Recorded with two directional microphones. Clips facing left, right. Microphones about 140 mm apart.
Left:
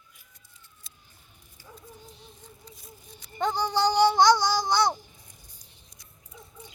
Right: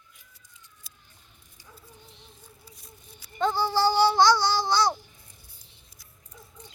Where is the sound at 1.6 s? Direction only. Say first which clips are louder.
Left 4 dB; 15° right (ahead or behind).